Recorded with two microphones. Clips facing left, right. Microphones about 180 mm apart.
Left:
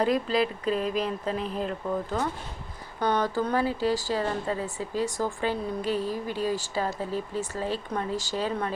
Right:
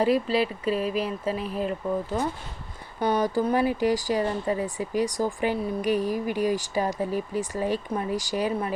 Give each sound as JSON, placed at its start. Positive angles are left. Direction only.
{"t": 0.0, "sound": "speech", "side_deg": -5}
{"t": 3.0, "sound": "speech", "side_deg": -10}